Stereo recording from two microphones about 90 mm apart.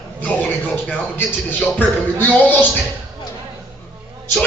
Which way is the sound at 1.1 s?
20° left (ahead or behind).